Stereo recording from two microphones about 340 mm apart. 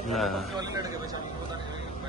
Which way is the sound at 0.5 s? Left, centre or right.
Centre.